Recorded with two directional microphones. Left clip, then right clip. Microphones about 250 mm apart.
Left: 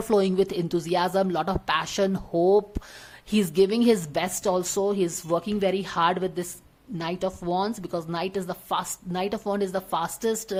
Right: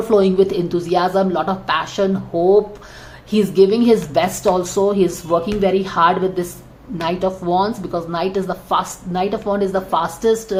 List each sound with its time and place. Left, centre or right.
0.1 s a woman's voice: left